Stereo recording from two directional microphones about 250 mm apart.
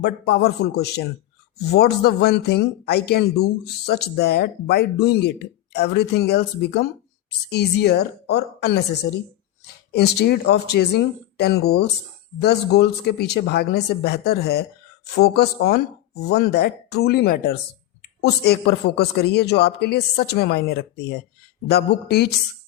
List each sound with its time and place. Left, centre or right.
0.0 s speech: left
9.9 s speech: left